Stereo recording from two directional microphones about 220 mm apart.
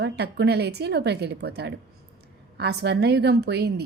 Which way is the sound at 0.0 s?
50° right (ahead or behind).